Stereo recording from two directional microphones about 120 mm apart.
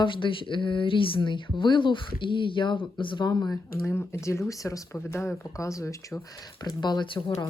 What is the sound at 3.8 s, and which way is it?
Speech, 20° left (ahead or behind).